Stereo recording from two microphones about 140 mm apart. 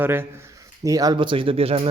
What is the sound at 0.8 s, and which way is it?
Speech, 25° right (ahead or behind).